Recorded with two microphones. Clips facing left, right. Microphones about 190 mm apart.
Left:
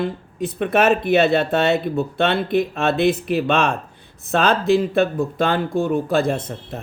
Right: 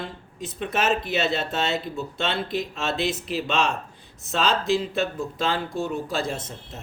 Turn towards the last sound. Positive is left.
turn(degrees=60)  # may be behind; listen again after turning